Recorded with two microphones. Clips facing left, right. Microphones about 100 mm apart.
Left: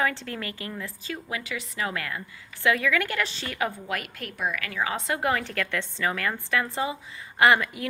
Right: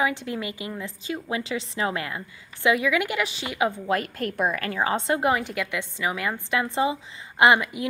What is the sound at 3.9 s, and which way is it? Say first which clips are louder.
A woman's voice: right 7 dB; 35° right (ahead or behind).